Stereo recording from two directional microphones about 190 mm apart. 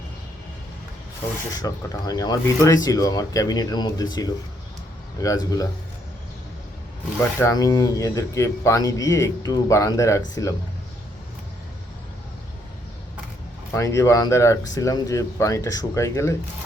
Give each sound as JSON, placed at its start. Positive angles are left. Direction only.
{"t": 1.5, "sound": "speech", "side_deg": 20}
{"t": 7.3, "sound": "speech", "side_deg": 15}
{"t": 13.7, "sound": "speech", "side_deg": 15}